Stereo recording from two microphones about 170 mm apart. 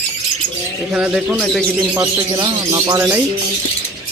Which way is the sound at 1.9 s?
20° right (ahead or behind).